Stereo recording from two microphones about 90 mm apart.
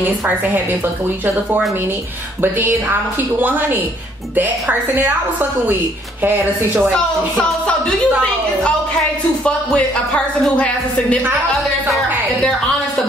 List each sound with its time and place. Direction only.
2.4 s a woman's voice: 25° right (ahead or behind)
7.3 s speech: 10° left (ahead or behind)
9.4 s speech: 10° left (ahead or behind)